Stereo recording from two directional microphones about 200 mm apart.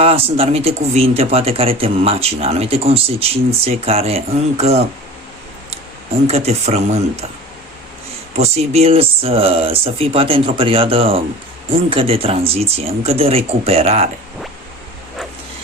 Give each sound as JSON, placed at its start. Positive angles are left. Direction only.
{"t": 0.0, "sound": "speech", "side_deg": -30}
{"t": 6.2, "sound": "speech", "side_deg": -30}
{"t": 8.4, "sound": "speech", "side_deg": -30}